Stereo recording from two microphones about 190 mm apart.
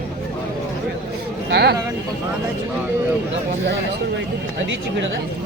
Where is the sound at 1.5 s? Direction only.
60° right (ahead or behind).